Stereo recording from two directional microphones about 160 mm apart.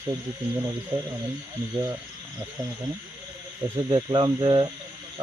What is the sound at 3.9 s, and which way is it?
Speech, 30° right (ahead or behind).